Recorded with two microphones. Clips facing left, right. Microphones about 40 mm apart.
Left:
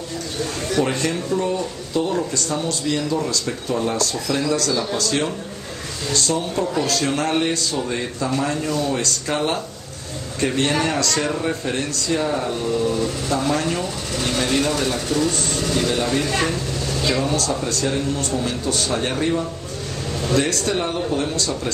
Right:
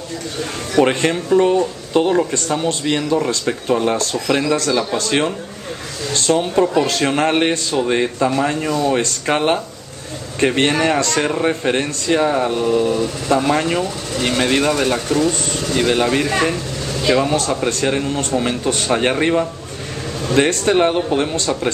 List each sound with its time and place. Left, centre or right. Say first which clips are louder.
0.7 s speech: right 7 dB; right
8.3 s speech: right 4 dB; right
15.0 s speech: right 3 dB; right
15.7 s speech: right 5 dB; right
21.3 s speech: right 4 dB; right